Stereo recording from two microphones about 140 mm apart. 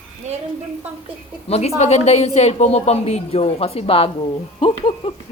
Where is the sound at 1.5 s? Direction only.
50° left (ahead or behind).